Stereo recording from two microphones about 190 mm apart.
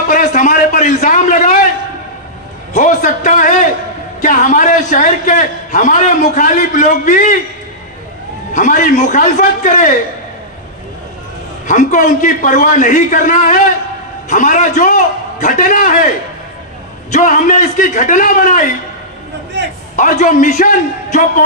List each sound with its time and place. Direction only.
0.1 s a sound: 40° left (ahead or behind)
2.7 s a man's voice: 40° left (ahead or behind)
8.5 s a man's voice: 40° left (ahead or behind)
11.6 s a man's voice: 40° left (ahead or behind)
17.1 s a man's voice: 40° left (ahead or behind)
20.0 s a man's voice: 40° left (ahead or behind)